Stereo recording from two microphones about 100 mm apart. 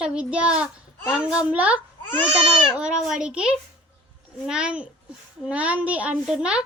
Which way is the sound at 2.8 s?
5° right (ahead or behind).